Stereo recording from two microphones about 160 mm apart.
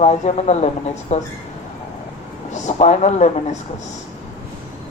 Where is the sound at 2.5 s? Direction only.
45° left (ahead or behind).